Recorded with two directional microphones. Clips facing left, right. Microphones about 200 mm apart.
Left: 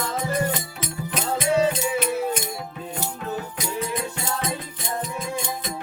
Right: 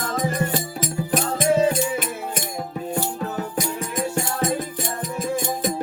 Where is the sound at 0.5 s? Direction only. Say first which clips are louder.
Right 6 dB; 45° right (ahead or behind).